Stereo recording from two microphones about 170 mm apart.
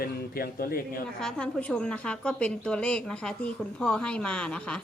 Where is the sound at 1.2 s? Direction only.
5° left (ahead or behind).